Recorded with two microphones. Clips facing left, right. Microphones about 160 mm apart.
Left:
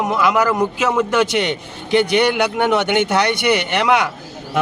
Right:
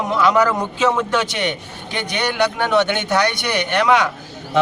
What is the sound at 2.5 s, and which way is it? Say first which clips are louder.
Speech: left 2 dB; 15° left (ahead or behind).